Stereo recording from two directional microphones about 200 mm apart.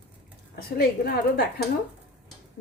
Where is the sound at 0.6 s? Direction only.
50° left (ahead or behind).